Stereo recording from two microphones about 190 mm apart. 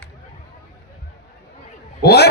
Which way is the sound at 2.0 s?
60° left (ahead or behind).